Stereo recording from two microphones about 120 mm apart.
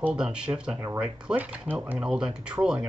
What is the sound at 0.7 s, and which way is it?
Speech, 20° right (ahead or behind).